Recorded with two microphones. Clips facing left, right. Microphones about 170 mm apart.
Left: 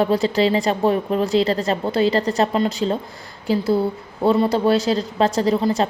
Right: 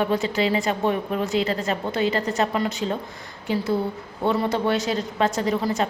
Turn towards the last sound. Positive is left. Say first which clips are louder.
# left 5 dB
turn(degrees=30)  # may be behind; listen again after turning